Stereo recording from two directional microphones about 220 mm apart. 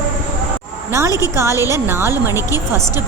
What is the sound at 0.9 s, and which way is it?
A woman's voice, 10° right (ahead or behind).